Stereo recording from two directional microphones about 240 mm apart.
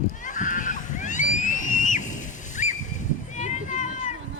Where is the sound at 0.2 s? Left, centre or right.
Left.